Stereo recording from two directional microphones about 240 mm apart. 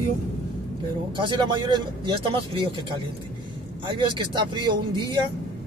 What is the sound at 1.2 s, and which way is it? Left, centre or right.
Speech, centre.